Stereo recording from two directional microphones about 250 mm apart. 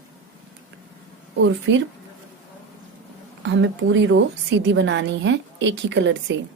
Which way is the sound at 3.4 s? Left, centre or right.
Right.